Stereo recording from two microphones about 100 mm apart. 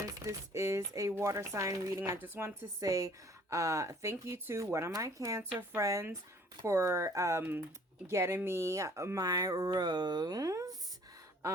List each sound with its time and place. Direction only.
0.3 s speech: 30° right (ahead or behind)
2.8 s speech: 30° right (ahead or behind)